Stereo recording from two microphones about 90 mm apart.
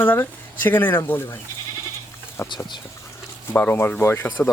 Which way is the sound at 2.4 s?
25° left (ahead or behind).